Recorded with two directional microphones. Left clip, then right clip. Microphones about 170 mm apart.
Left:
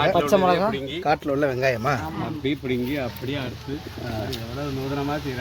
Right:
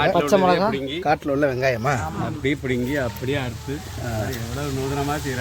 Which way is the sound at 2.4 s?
30° right (ahead or behind).